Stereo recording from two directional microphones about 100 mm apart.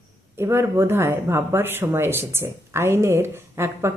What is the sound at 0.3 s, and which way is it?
Speech, 25° right (ahead or behind).